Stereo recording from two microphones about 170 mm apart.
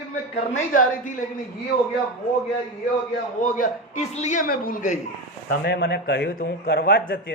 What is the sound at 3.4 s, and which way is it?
A man's voice, 50° left (ahead or behind).